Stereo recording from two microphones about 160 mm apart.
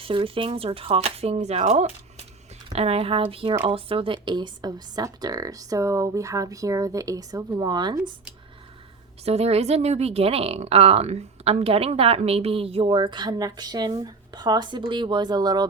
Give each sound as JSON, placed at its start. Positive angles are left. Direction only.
{"t": 0.0, "sound": "a woman's voice", "side_deg": -35}
{"t": 9.2, "sound": "speech", "side_deg": -40}